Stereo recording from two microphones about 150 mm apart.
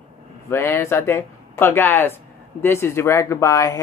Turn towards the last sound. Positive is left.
turn(degrees=25)  # may be behind; listen again after turning